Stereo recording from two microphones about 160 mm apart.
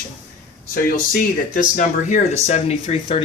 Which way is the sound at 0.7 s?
60° left (ahead or behind).